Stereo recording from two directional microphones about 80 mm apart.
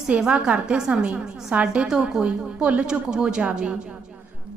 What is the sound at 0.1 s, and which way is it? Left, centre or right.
A woman's voice, centre.